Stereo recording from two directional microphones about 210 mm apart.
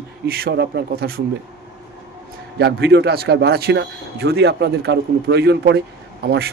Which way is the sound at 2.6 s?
50° right (ahead or behind).